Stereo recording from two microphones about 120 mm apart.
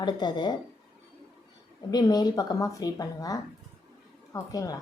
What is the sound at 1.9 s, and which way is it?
A woman's voice, 35° left (ahead or behind).